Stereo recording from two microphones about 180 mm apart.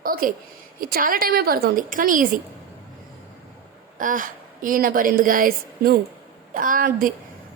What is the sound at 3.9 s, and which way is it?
A woman's voice, 50° right (ahead or behind).